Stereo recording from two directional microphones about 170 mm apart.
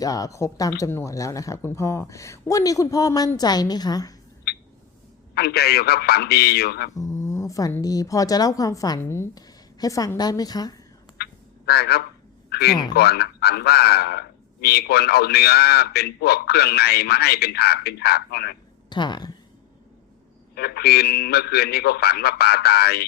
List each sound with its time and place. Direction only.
0.0 s speech: 20° left (ahead or behind)
5.3 s a man's voice: 70° left (ahead or behind)
6.9 s speech: 20° left (ahead or behind)
11.2 s frog: 70° left (ahead or behind)
12.5 s a sound: 70° left (ahead or behind)
12.9 s a man's voice: 70° left (ahead or behind)
18.9 s speech: 25° left (ahead or behind)
20.6 s a man's voice: 70° left (ahead or behind)